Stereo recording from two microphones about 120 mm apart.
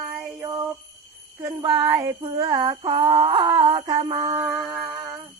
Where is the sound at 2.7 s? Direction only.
55° right (ahead or behind).